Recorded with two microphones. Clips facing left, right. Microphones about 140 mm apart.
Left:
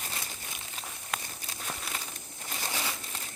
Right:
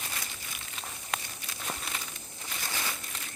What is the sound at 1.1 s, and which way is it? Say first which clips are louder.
Walk: right 1 dB; centre (ahead or behind).